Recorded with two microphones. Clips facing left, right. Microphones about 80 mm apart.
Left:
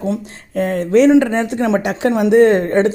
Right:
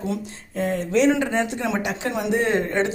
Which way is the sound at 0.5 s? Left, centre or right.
Left.